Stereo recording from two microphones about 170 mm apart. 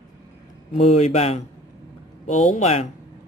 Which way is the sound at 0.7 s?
40° left (ahead or behind).